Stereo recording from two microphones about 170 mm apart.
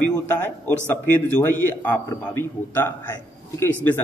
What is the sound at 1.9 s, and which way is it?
A man's voice, 10° left (ahead or behind).